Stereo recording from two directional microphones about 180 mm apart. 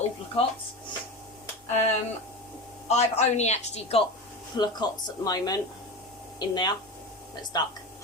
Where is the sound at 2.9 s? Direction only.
40° left (ahead or behind).